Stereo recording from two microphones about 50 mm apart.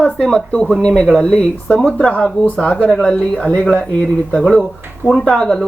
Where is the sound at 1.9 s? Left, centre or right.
Left.